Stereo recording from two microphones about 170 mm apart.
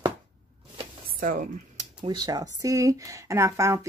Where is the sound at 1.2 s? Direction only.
55° right (ahead or behind).